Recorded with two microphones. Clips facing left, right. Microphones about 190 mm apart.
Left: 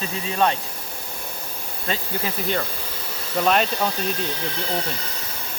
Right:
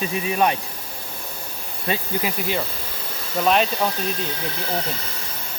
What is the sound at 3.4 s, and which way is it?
Speech, centre (ahead or behind).